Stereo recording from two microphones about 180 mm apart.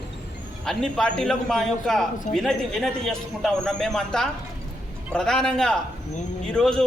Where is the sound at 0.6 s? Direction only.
Centre (ahead or behind).